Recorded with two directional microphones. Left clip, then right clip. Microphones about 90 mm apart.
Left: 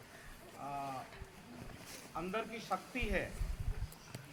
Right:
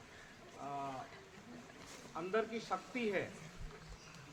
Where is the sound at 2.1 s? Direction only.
30° right (ahead or behind).